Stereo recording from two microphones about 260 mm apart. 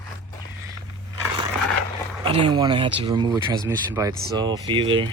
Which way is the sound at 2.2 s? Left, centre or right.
Centre.